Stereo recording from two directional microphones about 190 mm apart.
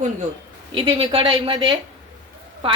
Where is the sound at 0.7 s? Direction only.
25° right (ahead or behind).